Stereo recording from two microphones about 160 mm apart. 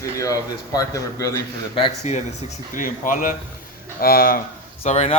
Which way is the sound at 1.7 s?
40° left (ahead or behind).